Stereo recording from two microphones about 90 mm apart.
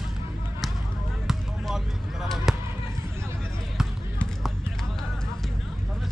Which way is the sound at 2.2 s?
Centre (ahead or behind).